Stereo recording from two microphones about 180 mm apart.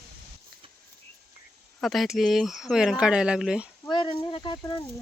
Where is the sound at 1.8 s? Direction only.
Centre (ahead or behind).